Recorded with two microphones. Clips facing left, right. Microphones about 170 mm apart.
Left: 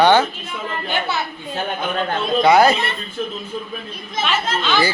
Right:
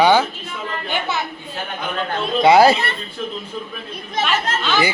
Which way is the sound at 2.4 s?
25° right (ahead or behind).